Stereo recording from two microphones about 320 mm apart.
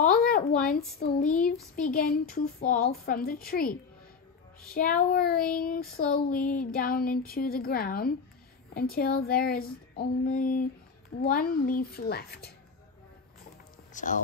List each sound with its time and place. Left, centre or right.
0.6 s a woman's voice: centre
1.8 s speech: left
4.7 s speech: left
13.9 s speech: left